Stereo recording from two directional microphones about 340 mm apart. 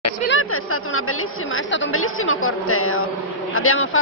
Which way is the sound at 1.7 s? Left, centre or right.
Left.